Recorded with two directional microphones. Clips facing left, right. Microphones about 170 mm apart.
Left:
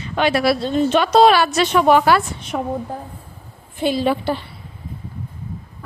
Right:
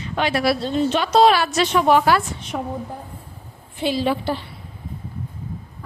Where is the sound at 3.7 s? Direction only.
50° left (ahead or behind).